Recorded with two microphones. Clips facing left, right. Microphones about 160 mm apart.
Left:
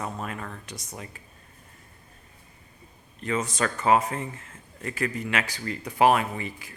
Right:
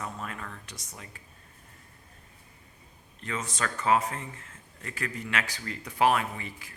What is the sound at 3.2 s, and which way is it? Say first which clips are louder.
Speech: left 6 dB; 15° left (ahead or behind).